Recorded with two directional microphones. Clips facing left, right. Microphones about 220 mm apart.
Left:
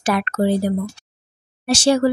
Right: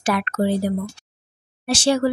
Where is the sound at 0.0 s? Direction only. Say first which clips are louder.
Left 2 dB; 40° left (ahead or behind).